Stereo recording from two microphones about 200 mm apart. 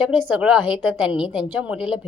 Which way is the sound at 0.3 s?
5° right (ahead or behind).